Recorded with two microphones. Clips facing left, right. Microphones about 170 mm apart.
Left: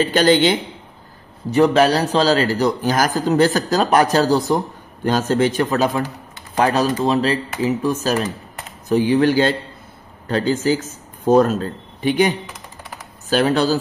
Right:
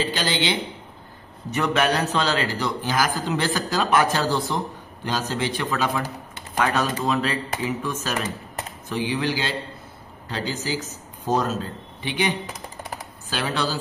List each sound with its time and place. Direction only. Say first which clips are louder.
0.0 s a man's voice: left 10 dB; 50° left (ahead or behind)
1.5 s a man's voice: left 8 dB; 35° left (ahead or behind)